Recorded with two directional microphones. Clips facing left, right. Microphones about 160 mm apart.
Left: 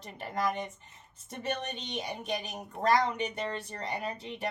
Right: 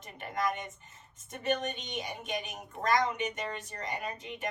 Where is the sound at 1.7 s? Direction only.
35° left (ahead or behind).